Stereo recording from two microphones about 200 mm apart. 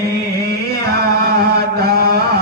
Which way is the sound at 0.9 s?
50° right (ahead or behind).